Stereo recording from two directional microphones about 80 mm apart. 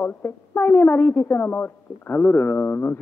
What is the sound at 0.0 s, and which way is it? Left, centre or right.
Speech, left.